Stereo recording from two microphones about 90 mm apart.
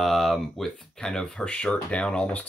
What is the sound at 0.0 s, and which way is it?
Speech, centre (ahead or behind).